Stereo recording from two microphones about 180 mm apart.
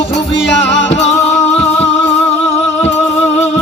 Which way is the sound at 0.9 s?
35° left (ahead or behind).